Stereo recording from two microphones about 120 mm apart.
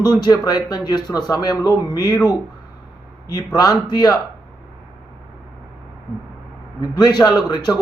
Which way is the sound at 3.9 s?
35° left (ahead or behind).